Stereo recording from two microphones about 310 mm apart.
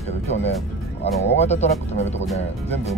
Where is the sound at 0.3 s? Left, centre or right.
Left.